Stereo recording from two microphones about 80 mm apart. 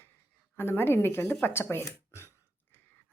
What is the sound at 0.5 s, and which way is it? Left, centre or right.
Speech, left.